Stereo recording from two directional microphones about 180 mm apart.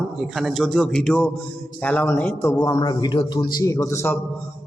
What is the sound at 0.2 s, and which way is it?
A man's voice, centre (ahead or behind).